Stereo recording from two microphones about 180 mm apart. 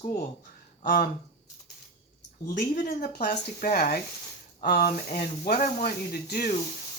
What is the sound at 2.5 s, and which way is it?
Speech, 45° left (ahead or behind).